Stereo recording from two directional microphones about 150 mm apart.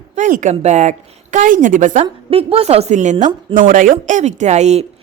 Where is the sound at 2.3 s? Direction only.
40° right (ahead or behind); by 3.9 s 65° right (ahead or behind).